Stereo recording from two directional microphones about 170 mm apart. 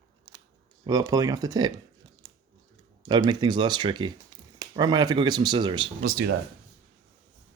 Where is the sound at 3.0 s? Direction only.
25° right (ahead or behind).